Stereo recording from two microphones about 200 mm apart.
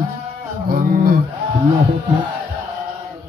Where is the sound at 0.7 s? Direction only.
50° right (ahead or behind).